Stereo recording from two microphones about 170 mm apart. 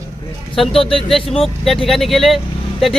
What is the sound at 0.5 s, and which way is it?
Speech, centre (ahead or behind).